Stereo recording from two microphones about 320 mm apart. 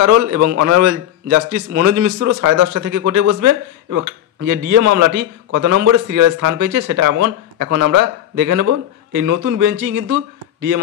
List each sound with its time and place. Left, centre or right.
0.0 s a man's voice: right